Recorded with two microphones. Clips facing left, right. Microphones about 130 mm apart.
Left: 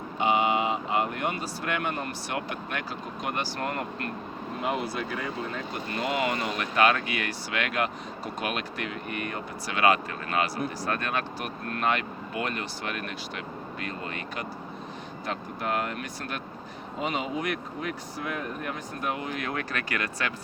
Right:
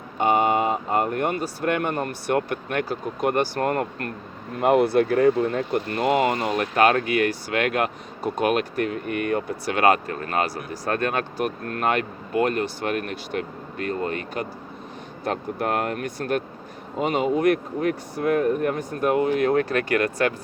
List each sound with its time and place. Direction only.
0.2 s speech: 45° right (ahead or behind)
4.6 s speech: 60° right (ahead or behind)